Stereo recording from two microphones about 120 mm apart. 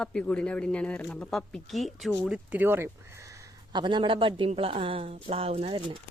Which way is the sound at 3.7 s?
40° right (ahead or behind).